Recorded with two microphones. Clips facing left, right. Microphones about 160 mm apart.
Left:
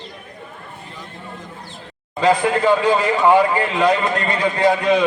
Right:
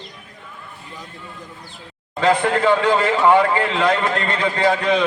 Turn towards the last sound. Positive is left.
turn(degrees=15)  # may be behind; listen again after turning